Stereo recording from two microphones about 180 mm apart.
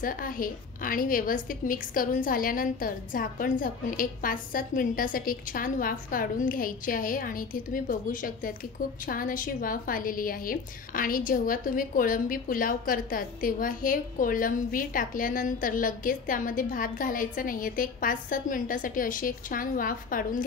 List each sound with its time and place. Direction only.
0.0 s a woman's voice: 50° left (ahead or behind)